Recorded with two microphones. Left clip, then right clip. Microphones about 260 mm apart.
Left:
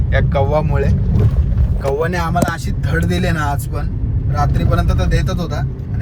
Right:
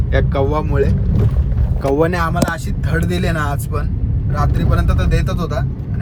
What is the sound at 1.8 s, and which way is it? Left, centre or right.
Speech, right.